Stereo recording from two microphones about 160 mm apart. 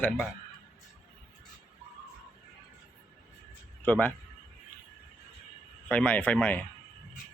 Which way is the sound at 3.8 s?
10° left (ahead or behind).